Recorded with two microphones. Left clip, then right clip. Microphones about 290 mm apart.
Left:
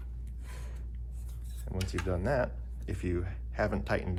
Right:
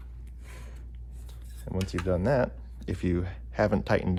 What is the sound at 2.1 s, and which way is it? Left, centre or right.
Speech, right.